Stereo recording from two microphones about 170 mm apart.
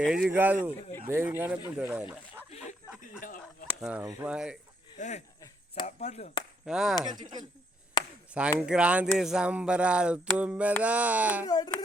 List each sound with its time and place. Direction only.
0.0 s speech: 5° right (ahead or behind)
2.5 s a sound: 40° left (ahead or behind)
3.0 s a sound: 50° left (ahead or behind)
3.8 s speech: 5° right (ahead or behind)
4.9 s speech: 45° left (ahead or behind)
6.7 s speech: centre (ahead or behind)
7.1 s speech: 25° right (ahead or behind)
8.3 s speech: 5° right (ahead or behind)
11.4 s speech: 25° left (ahead or behind)